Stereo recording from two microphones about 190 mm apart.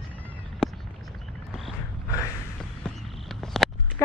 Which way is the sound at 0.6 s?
5° left (ahead or behind).